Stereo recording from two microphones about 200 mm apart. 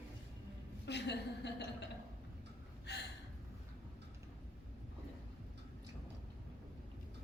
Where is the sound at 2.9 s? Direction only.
55° left (ahead or behind).